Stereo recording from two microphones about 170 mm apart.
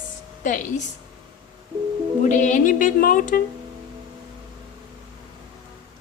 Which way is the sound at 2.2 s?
50° left (ahead or behind).